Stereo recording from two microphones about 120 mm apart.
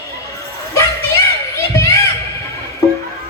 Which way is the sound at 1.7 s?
25° left (ahead or behind).